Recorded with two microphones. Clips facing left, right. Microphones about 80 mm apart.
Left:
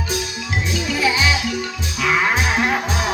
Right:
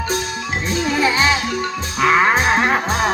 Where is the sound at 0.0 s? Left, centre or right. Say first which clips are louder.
Right 3 dB; right.